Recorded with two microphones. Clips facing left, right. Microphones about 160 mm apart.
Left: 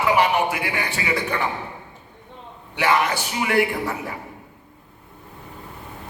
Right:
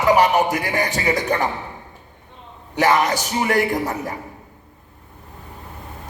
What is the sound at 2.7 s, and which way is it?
A man's voice, 40° right (ahead or behind).